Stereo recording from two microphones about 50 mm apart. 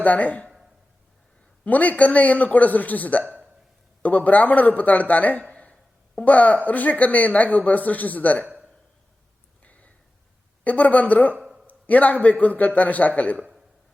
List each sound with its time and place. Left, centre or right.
0.0 s speech: left
1.6 s speech: left
9.6 s a sound: left
10.6 s speech: left